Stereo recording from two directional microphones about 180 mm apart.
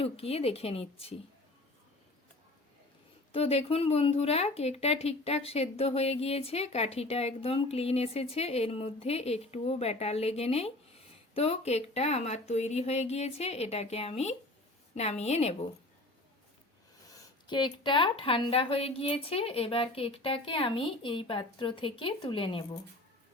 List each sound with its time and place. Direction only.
0.0 s speech: 35° left (ahead or behind)
3.3 s speech: 35° left (ahead or behind)
17.4 s speech: 25° left (ahead or behind)